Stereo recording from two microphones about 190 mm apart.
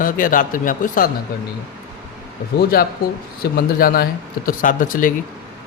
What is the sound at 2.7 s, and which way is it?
Speech, 50° left (ahead or behind).